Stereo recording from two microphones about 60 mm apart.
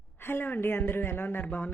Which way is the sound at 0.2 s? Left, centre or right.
Left.